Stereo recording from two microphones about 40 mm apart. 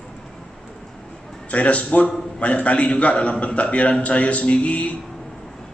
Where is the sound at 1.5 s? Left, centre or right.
Left.